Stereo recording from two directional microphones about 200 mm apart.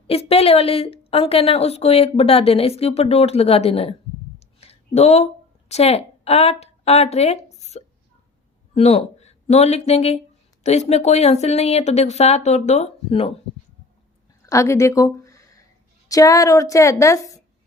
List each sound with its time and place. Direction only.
0.1 s a woman's voice: 30° left (ahead or behind)
14.4 s a woman's voice: 15° left (ahead or behind)